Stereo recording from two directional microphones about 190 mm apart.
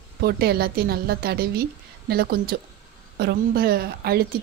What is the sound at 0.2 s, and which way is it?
A woman's voice, 55° right (ahead or behind).